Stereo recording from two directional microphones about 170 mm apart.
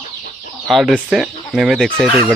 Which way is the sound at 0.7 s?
Centre (ahead or behind).